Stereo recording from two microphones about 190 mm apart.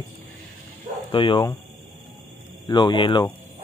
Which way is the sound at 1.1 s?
25° left (ahead or behind).